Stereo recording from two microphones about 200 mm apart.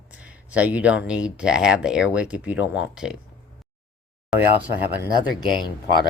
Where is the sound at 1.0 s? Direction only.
5° right (ahead or behind).